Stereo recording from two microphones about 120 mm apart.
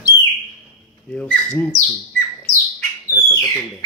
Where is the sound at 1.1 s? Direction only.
10° left (ahead or behind).